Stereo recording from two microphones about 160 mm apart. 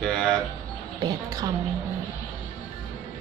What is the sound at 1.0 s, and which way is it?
Speech, 20° right (ahead or behind).